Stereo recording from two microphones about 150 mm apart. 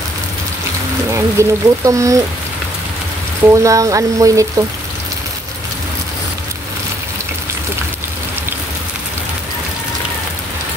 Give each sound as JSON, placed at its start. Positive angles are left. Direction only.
{"t": 1.1, "sound": "speech", "side_deg": -20}
{"t": 3.5, "sound": "speech", "side_deg": -20}